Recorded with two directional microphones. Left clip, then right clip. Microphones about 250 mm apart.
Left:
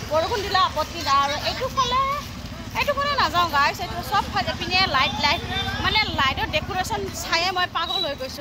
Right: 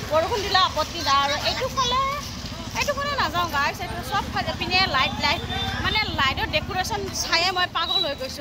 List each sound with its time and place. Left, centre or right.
0.1 s speech: centre